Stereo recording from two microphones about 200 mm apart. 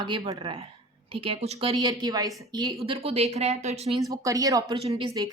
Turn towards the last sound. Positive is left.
turn(degrees=-30)  # may be behind; listen again after turning